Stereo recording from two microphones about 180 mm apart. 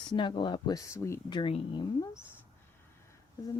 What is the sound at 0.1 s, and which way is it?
Speech, 25° left (ahead or behind).